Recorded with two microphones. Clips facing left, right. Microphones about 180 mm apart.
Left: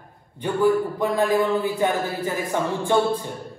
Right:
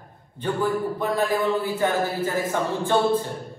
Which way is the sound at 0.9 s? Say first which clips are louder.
Left 3 dB; 15° left (ahead or behind).